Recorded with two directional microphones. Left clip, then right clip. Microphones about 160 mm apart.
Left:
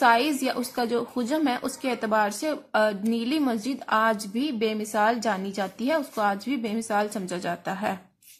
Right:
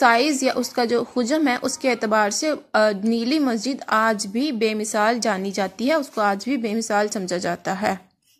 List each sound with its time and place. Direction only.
0.0 s a woman's voice: 35° right (ahead or behind)